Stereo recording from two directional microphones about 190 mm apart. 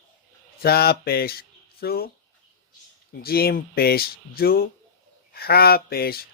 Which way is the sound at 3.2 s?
55° left (ahead or behind).